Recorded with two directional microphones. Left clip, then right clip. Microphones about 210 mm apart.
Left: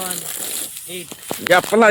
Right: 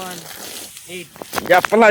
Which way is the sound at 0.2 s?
20° left (ahead or behind).